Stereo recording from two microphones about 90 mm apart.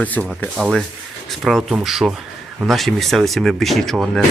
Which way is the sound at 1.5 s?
Centre (ahead or behind).